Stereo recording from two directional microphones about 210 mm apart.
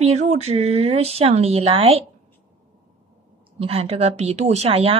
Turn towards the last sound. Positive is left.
turn(degrees=-30)  # may be behind; listen again after turning